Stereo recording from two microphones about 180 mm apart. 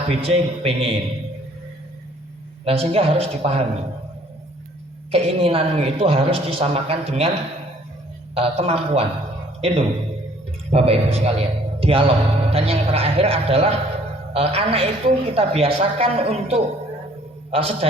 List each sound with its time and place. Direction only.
0.1 s speech: 30° right (ahead or behind)
2.6 s speech: 35° right (ahead or behind)
5.1 s speech: 30° right (ahead or behind)
8.4 s speech: 30° right (ahead or behind)